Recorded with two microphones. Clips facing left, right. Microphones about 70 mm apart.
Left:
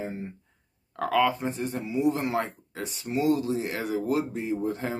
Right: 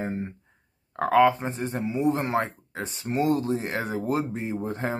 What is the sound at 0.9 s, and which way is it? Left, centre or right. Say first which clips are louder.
Speech: right 5 dB; right.